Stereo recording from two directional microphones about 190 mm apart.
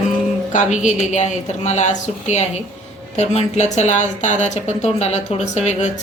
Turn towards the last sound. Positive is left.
turn(degrees=35)  # may be behind; listen again after turning